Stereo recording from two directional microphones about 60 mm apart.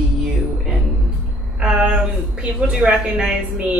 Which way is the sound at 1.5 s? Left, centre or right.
Centre.